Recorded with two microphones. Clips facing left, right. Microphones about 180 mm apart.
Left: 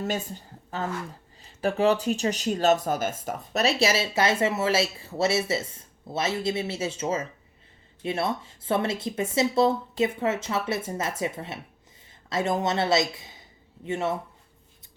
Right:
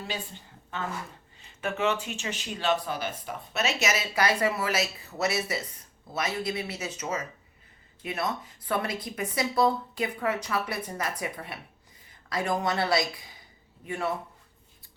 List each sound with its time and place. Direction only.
0.0 s speech: 45° left (ahead or behind); by 14.2 s 25° left (ahead or behind)